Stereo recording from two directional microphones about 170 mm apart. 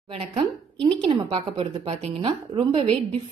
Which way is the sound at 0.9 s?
35° right (ahead or behind).